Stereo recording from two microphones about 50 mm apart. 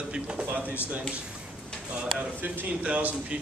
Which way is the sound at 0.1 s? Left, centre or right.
Right.